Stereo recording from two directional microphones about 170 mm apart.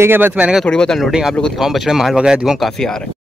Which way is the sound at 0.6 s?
5° left (ahead or behind).